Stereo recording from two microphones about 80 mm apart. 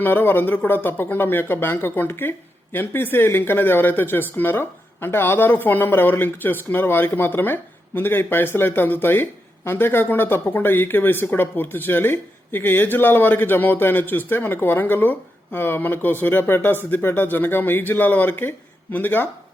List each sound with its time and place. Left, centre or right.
0.0 s speech: left